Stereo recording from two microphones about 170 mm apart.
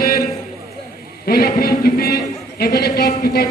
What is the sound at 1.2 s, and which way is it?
A man's voice, 65° left (ahead or behind).